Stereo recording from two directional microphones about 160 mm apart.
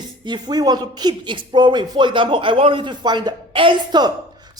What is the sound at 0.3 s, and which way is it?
A woman's voice, 25° right (ahead or behind).